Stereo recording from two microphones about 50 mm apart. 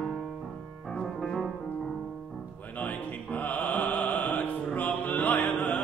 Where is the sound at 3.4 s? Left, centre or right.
Left.